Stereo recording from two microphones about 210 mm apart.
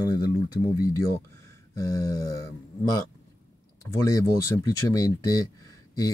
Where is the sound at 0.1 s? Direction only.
20° left (ahead or behind).